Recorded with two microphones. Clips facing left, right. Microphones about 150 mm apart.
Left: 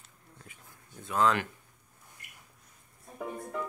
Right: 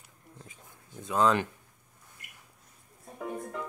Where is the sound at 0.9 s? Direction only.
20° right (ahead or behind).